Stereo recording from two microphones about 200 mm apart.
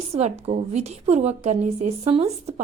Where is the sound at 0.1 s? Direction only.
30° right (ahead or behind).